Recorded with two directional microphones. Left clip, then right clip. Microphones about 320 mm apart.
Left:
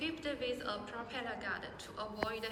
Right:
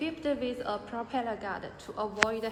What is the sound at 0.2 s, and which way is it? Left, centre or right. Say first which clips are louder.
A woman's voice: right 7 dB; right.